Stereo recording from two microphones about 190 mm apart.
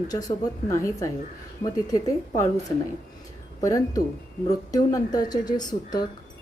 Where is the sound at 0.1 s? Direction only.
20° left (ahead or behind).